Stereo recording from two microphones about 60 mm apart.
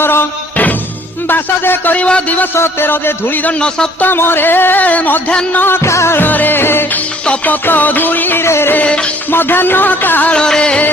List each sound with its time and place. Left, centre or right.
0.0 s music: left
1.3 s music: left
4.0 s music: left
5.5 s music: left
5.9 s music: left
6.1 s music: left
8.4 s music: left
10.3 s music: centre